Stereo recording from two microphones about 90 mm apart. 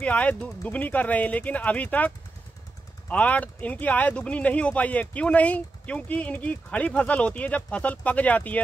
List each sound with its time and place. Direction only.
0.0 s speech: 15° left (ahead or behind)